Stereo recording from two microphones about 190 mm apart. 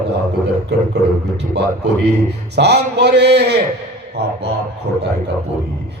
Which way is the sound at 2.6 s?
60° right (ahead or behind).